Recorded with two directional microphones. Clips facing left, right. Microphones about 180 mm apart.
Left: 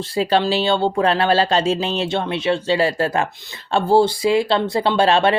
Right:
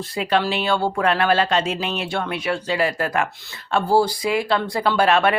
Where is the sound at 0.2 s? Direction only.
30° left (ahead or behind).